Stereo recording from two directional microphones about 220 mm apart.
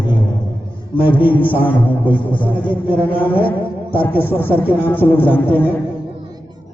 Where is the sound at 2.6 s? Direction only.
10° left (ahead or behind).